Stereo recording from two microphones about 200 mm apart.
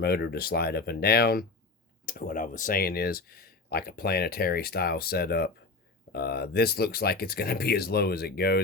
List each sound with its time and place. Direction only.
0.0 s speech: 55° left (ahead or behind)